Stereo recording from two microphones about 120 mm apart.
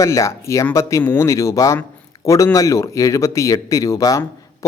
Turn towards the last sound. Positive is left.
turn(degrees=25)  # may be behind; listen again after turning